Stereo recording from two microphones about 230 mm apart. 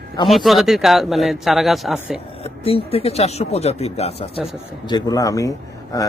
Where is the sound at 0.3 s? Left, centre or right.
Centre.